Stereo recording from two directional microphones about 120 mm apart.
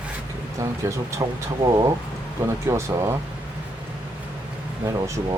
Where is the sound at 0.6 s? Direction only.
25° right (ahead or behind).